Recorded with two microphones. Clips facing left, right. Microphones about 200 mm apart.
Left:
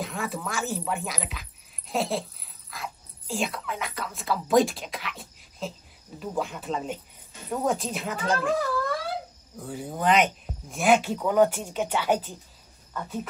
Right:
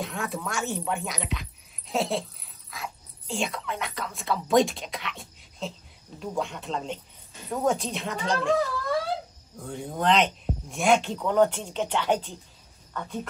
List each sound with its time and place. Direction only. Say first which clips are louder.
0.0 s a woman's voice: even; centre (ahead or behind)
9.6 s a woman's voice: even; 5° left (ahead or behind)